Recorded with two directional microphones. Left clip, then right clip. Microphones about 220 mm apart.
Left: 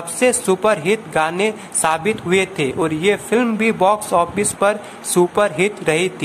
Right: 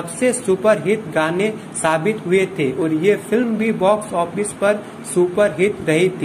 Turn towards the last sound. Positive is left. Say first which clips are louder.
# right 1 dB
turn(degrees=25)  # may be behind; listen again after turning